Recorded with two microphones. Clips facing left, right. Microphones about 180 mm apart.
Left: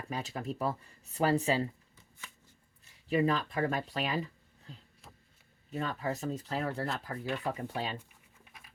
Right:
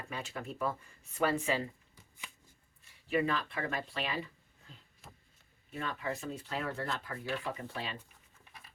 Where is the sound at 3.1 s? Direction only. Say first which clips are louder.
Left 3 dB; 40° left (ahead or behind).